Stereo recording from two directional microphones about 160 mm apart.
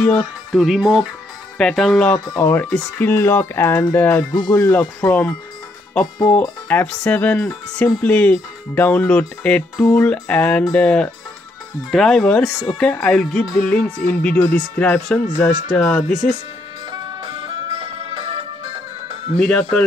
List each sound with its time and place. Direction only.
0.0 s speech: 5° left (ahead or behind)
2.1 s speech: 20° left (ahead or behind)
6.7 s speech: 10° left (ahead or behind)
15.7 s speech: 5° left (ahead or behind)
16.9 s music: 25° right (ahead or behind)
19.3 s speech: 5° left (ahead or behind)